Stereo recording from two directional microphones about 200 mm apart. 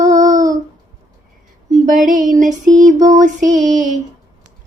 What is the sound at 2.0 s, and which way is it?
Music, 40° right (ahead or behind).